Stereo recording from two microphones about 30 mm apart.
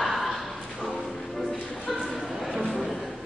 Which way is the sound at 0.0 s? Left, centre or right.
Centre.